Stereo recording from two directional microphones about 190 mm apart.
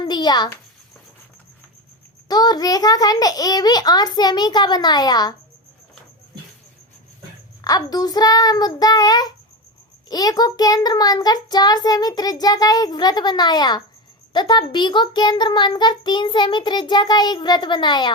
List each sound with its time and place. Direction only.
0.0 s a sound: 25° left (ahead or behind)
2.2 s a child's voice: 20° left (ahead or behind)
7.6 s a child's voice: 20° left (ahead or behind)